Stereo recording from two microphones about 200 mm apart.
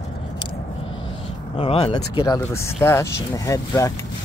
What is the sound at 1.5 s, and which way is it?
Speech, 30° left (ahead or behind).